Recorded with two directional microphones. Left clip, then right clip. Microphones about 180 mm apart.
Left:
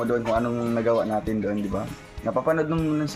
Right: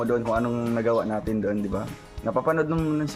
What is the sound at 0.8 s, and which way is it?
Speech, 15° right (ahead or behind).